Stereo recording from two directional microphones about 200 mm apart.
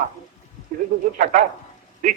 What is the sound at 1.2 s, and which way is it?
Speech, 40° right (ahead or behind).